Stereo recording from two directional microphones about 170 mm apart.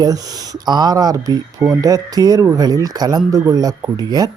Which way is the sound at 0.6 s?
25° right (ahead or behind).